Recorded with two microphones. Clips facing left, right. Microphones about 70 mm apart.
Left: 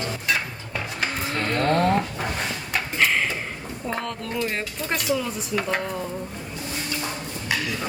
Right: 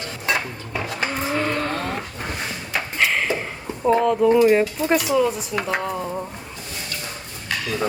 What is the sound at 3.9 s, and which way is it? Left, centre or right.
Speech, centre.